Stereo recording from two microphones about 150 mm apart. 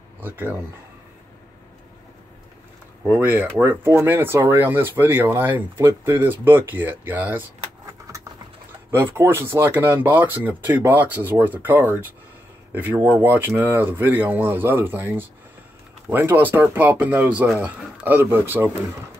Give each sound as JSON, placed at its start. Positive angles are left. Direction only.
{"t": 0.2, "sound": "speech", "side_deg": -15}
{"t": 3.0, "sound": "speech", "side_deg": -15}
{"t": 8.1, "sound": "a sound", "side_deg": -20}
{"t": 8.9, "sound": "speech", "side_deg": -15}